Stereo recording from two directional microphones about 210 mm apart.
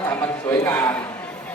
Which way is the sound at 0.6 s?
10° left (ahead or behind).